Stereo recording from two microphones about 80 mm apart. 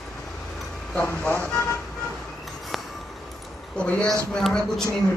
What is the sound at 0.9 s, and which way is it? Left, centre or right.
Speech, left.